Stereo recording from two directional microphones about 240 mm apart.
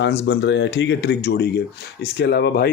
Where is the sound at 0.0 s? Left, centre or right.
Left.